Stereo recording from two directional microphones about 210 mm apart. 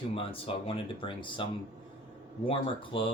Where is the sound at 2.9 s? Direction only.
25° left (ahead or behind).